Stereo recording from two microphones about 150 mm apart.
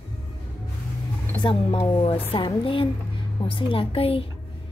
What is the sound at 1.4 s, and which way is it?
Speech, 35° left (ahead or behind).